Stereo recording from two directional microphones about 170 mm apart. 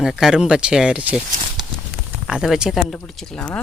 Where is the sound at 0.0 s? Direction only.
5° right (ahead or behind).